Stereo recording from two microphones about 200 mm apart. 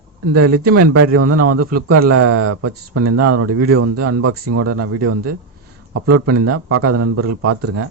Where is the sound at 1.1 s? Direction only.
90° right.